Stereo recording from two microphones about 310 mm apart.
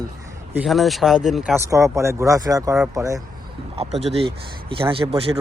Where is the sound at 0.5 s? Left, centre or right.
Centre.